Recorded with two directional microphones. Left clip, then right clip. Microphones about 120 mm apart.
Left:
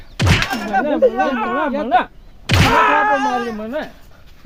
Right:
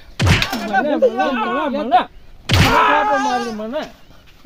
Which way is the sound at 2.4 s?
Centre (ahead or behind).